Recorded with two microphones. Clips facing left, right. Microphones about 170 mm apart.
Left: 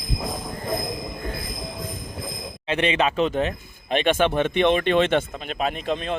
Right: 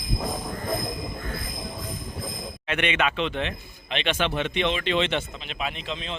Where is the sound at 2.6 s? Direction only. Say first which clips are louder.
Left 4 dB; 30° left (ahead or behind).